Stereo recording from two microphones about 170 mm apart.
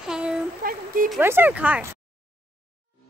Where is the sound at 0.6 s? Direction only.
60° right (ahead or behind).